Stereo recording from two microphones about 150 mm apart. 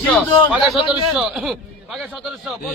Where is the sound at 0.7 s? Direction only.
5° right (ahead or behind).